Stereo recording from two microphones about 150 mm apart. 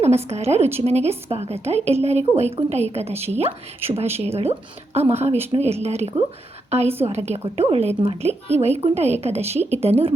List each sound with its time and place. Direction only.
0.0 s a woman's voice: 45° right (ahead or behind)